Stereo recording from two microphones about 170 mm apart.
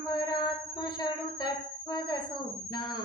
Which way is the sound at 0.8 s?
25° left (ahead or behind).